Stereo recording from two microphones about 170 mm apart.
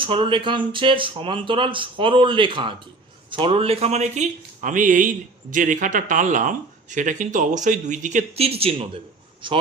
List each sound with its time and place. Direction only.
0.0 s speech: 30° right (ahead or behind)